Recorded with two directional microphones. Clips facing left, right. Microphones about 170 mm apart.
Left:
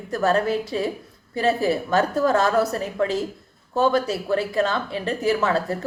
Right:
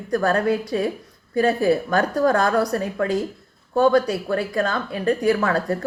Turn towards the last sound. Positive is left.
turn(degrees=25)  # may be behind; listen again after turning